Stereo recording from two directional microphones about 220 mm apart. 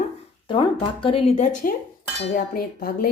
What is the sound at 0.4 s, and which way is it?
Speech, 20° left (ahead or behind).